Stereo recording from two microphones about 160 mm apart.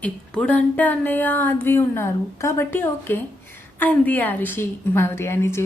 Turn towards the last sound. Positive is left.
turn(degrees=15)  # may be behind; listen again after turning